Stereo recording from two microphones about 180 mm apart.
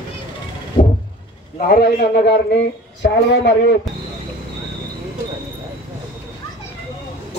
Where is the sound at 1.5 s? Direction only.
55° left (ahead or behind).